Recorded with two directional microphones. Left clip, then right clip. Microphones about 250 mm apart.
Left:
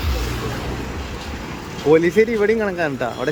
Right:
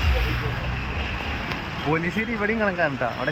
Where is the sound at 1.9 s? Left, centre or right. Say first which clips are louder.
Left 12 dB; left.